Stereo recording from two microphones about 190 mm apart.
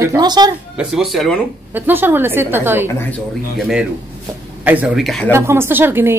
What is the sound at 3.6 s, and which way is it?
Speech, centre (ahead or behind).